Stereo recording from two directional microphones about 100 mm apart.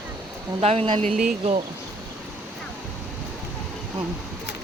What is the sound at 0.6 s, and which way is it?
Speech, 75° right (ahead or behind).